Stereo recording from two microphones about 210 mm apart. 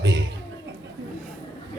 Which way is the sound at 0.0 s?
55° right (ahead or behind).